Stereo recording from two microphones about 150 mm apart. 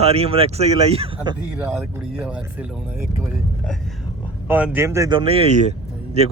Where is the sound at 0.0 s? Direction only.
40° right (ahead or behind).